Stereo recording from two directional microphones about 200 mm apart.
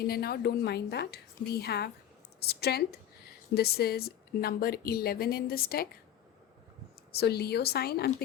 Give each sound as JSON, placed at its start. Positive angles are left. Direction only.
{"t": 0.0, "sound": "a woman's voice", "side_deg": 50}
{"t": 7.1, "sound": "a woman's voice", "side_deg": 55}